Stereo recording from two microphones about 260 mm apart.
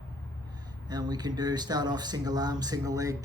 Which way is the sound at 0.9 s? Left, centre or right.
Centre.